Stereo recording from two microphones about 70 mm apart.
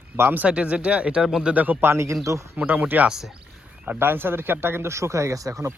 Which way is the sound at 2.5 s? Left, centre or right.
Right.